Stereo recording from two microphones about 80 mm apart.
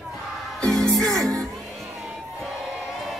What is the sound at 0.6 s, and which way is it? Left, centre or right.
Music, centre.